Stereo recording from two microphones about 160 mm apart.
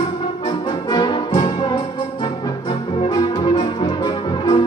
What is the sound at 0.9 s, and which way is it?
Music, 25° left (ahead or behind).